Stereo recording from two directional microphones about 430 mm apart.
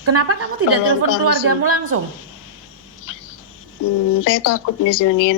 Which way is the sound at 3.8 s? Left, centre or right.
Left.